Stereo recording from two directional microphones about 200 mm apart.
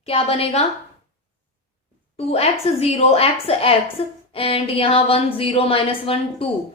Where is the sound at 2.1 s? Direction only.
30° left (ahead or behind).